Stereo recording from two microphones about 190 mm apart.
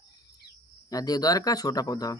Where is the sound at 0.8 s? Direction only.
20° left (ahead or behind).